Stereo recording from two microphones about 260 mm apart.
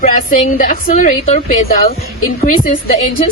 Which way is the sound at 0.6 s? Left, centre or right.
Left.